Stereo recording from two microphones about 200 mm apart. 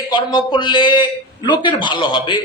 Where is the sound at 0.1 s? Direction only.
25° left (ahead or behind).